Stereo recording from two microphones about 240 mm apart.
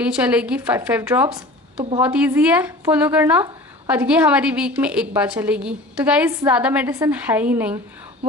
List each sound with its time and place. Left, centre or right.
0.0 s speech: centre